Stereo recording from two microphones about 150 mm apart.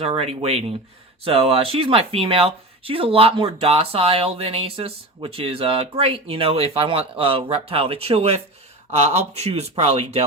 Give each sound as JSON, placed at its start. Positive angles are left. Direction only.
{"t": 0.0, "sound": "speech", "side_deg": -40}